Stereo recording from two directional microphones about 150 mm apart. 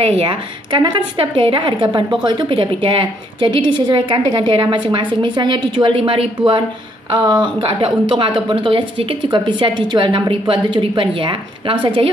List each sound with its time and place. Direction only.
0.0 s a woman's voice: 40° right (ahead or behind)